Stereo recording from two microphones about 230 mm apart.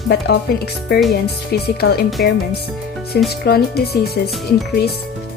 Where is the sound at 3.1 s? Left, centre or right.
Left.